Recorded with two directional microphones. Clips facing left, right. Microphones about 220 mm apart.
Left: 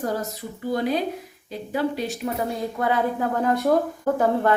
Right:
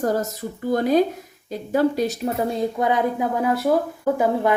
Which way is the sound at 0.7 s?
45° right (ahead or behind).